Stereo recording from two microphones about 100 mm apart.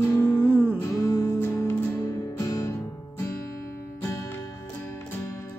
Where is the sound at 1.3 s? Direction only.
20° left (ahead or behind).